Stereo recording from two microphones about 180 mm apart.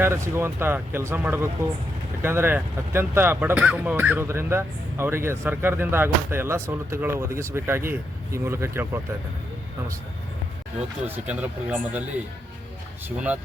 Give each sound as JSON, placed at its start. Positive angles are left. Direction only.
{"t": 0.0, "sound": "speech", "side_deg": -15}
{"t": 11.0, "sound": "speech", "side_deg": -10}